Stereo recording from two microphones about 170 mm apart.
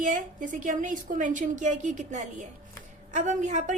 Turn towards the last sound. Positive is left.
turn(degrees=-45)  # may be behind; listen again after turning